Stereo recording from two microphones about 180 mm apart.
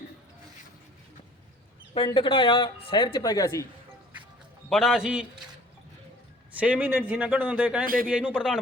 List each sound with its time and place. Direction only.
2.0 s speech: 30° left (ahead or behind)
4.7 s a man's voice: centre (ahead or behind)
6.6 s a man's voice: 10° right (ahead or behind)